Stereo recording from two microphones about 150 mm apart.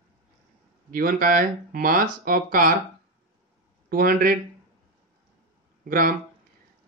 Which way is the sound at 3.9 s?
70° right (ahead or behind).